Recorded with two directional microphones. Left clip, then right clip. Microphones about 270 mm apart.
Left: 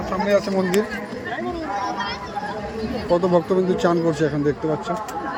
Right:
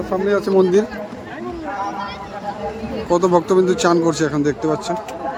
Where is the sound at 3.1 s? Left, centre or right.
Right.